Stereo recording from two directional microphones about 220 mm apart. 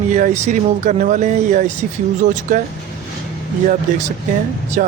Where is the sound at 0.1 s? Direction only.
30° right (ahead or behind).